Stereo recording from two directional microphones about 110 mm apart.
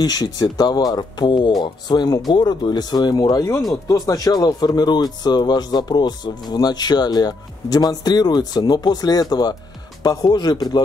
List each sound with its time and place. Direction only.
0.0 s speech: 35° left (ahead or behind)